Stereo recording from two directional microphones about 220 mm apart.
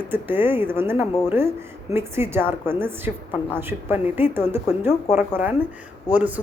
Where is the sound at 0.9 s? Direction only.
20° left (ahead or behind).